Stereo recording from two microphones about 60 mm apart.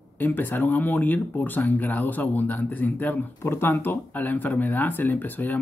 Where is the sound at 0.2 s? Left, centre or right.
Left.